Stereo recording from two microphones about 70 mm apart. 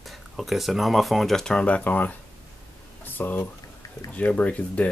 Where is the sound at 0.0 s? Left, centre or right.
Centre.